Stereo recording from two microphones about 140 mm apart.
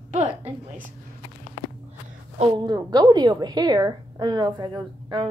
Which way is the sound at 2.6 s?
30° right (ahead or behind).